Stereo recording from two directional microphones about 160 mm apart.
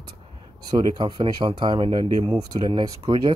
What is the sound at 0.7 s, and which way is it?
Speech, 30° right (ahead or behind).